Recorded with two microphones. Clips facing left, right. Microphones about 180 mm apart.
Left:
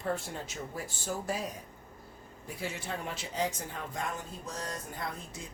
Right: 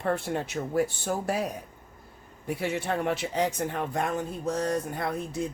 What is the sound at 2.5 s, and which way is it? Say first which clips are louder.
Speech: right 9 dB; 65° right (ahead or behind).